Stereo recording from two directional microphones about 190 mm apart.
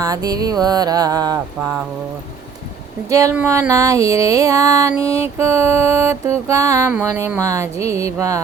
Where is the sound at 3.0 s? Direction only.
15° right (ahead or behind).